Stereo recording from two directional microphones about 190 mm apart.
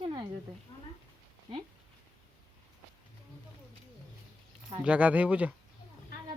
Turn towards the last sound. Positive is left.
turn(degrees=-5)  # may be behind; listen again after turning